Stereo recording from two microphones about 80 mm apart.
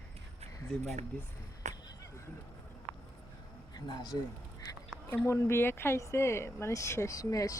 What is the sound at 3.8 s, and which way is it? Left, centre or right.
Speech, left.